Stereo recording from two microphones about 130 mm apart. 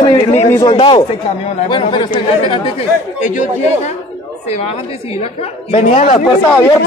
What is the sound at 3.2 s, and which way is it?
Speech, 70° left (ahead or behind).